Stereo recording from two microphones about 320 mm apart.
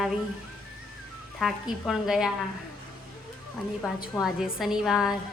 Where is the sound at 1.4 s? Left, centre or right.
Centre.